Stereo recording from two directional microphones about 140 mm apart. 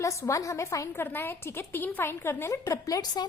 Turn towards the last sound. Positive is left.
turn(degrees=25)  # may be behind; listen again after turning